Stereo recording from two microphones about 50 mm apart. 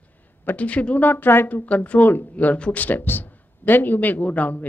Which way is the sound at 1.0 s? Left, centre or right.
Left.